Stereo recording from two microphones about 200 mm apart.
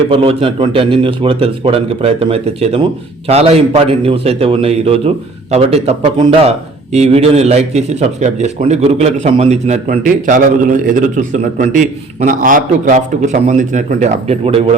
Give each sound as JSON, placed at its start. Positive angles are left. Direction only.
{"t": 0.1, "sound": "a man's voice", "side_deg": -30}